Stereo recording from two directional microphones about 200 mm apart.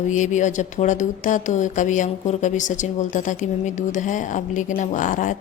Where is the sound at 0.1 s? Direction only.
40° left (ahead or behind).